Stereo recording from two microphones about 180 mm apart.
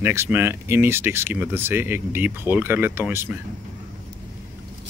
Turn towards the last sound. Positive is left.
turn(degrees=-10)  # may be behind; listen again after turning